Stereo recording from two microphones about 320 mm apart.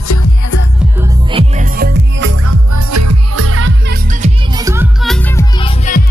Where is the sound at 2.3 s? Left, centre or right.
Right.